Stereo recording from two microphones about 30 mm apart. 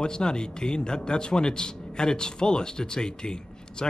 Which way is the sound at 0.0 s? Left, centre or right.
Left.